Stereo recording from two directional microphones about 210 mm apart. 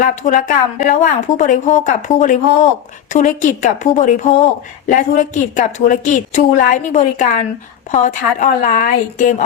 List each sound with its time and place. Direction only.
0.0 s speech: 35° left (ahead or behind)